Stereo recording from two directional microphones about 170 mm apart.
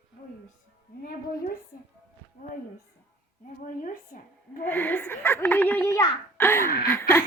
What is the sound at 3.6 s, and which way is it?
A woman's voice, 55° left (ahead or behind).